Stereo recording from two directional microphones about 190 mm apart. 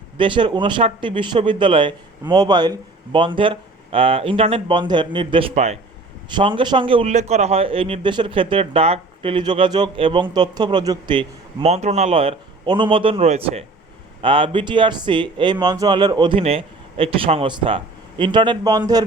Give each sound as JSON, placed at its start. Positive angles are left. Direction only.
{"t": 0.2, "sound": "a man's voice", "side_deg": -25}
{"t": 6.3, "sound": "a man's voice", "side_deg": -25}